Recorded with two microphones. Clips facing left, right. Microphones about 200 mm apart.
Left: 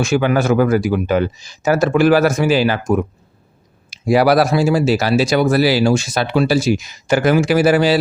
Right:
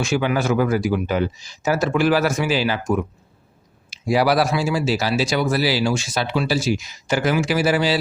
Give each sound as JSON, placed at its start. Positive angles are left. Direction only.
{"t": 0.0, "sound": "speech", "side_deg": 50}
{"t": 4.1, "sound": "speech", "side_deg": 55}